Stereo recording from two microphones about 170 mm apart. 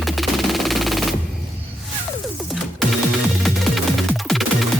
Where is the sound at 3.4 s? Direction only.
Centre (ahead or behind).